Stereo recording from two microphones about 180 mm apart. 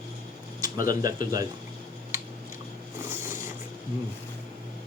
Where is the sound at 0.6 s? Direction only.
20° right (ahead or behind).